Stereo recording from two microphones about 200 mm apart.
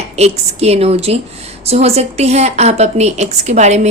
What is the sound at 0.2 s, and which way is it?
A woman's voice, 30° right (ahead or behind).